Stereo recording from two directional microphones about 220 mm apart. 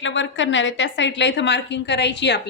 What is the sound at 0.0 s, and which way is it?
A woman's voice, 55° left (ahead or behind).